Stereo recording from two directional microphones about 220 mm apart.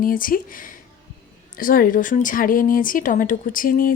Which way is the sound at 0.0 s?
40° left (ahead or behind).